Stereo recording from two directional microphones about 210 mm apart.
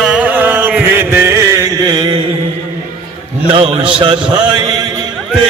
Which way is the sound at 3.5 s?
25° right (ahead or behind).